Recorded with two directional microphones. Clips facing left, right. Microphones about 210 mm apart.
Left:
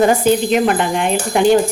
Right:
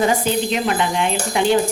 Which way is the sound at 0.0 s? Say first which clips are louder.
Left 5 dB; 50° left (ahead or behind).